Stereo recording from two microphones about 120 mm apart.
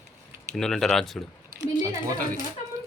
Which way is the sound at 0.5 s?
5° left (ahead or behind).